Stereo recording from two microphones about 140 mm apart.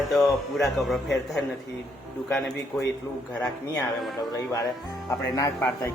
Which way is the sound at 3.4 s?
20° left (ahead or behind).